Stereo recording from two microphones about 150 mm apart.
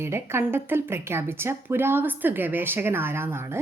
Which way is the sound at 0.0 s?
15° right (ahead or behind).